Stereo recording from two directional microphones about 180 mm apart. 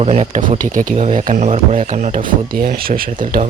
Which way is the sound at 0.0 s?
35° right (ahead or behind).